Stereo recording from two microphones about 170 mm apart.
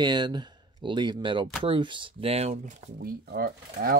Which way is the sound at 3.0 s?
60° right (ahead or behind).